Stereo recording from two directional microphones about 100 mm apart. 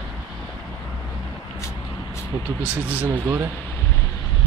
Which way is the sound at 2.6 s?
15° right (ahead or behind).